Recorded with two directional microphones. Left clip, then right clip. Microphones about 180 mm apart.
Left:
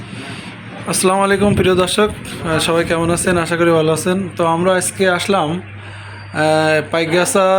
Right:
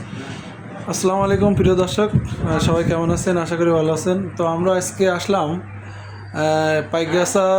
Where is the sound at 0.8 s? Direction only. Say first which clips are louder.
Left 4 dB; centre (ahead or behind).